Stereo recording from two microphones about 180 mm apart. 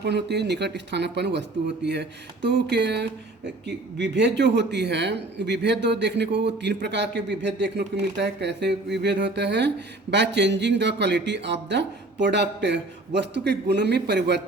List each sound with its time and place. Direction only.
0.0 s speech: 70° right (ahead or behind)